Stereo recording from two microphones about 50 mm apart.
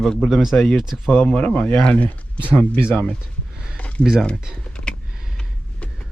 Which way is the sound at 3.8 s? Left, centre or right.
Left.